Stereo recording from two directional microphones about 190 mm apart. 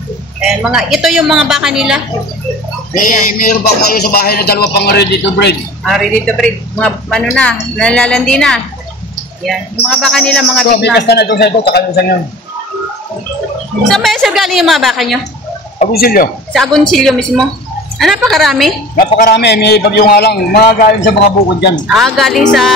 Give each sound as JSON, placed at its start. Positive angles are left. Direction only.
{"t": 0.4, "sound": "speech", "side_deg": -5}
{"t": 2.9, "sound": "a man's voice", "side_deg": 45}
{"t": 5.9, "sound": "speech", "side_deg": 0}
{"t": 10.6, "sound": "a man's voice", "side_deg": 60}
{"t": 13.8, "sound": "speech", "side_deg": 0}
{"t": 15.9, "sound": "speech", "side_deg": 50}
{"t": 16.5, "sound": "speech", "side_deg": 0}
{"t": 19.1, "sound": "a man's voice", "side_deg": 55}
{"t": 21.8, "sound": "speech", "side_deg": 0}